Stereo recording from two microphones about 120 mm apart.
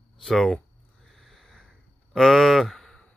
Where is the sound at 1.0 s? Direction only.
Centre (ahead or behind).